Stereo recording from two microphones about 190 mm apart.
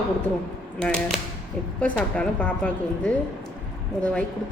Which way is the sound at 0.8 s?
5° left (ahead or behind).